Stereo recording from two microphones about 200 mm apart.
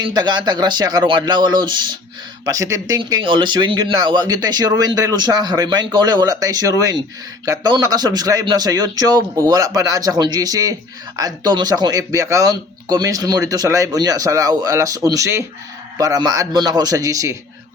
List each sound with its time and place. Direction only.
0.1 s a man's voice: 20° right (ahead or behind)